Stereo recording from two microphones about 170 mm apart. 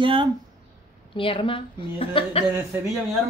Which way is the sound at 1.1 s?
30° left (ahead or behind).